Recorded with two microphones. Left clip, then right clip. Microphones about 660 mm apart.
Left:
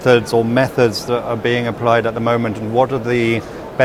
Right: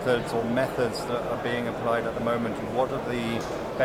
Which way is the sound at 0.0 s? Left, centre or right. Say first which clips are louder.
Left 12 dB; left.